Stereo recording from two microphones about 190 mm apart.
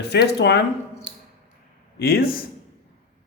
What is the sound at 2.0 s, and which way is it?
Speech, 55° left (ahead or behind).